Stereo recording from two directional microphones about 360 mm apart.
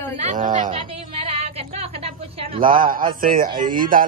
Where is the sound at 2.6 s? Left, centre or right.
Right.